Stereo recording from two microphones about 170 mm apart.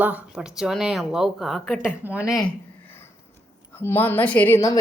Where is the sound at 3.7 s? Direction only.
10° left (ahead or behind).